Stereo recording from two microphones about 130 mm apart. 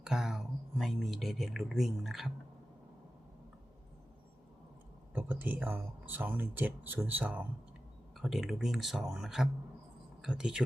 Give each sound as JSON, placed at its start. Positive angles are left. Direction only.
{"t": 0.0, "sound": "speech", "side_deg": -5}
{"t": 5.1, "sound": "speech", "side_deg": -15}
{"t": 8.2, "sound": "speech", "side_deg": 0}